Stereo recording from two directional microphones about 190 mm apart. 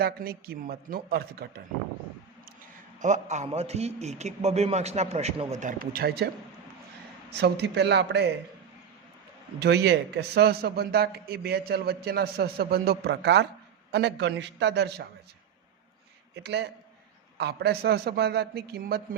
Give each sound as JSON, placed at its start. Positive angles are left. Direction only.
{"t": 0.0, "sound": "a man's voice", "side_deg": -50}
{"t": 3.0, "sound": "a man's voice", "side_deg": -40}
{"t": 7.3, "sound": "a man's voice", "side_deg": -60}
{"t": 9.6, "sound": "a man's voice", "side_deg": -60}
{"t": 16.3, "sound": "a man's voice", "side_deg": -60}